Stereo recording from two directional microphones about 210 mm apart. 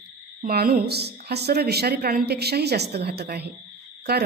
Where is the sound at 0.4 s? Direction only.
45° right (ahead or behind).